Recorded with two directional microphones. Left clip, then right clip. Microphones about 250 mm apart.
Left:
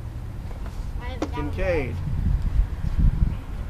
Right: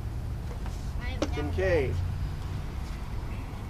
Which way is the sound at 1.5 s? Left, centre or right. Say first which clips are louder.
Left 1 dB; left.